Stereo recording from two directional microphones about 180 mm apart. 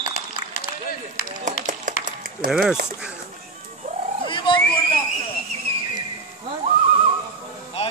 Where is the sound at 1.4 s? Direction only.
45° right (ahead or behind).